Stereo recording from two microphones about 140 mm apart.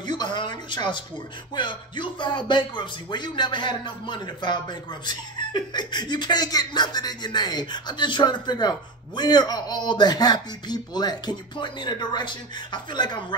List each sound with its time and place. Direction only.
0.0 s speech: 30° left (ahead or behind)